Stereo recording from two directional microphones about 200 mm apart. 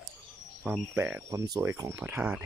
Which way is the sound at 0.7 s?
10° right (ahead or behind).